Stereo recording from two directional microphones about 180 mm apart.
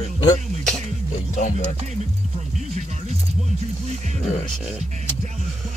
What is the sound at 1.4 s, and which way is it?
Speech, 40° left (ahead or behind).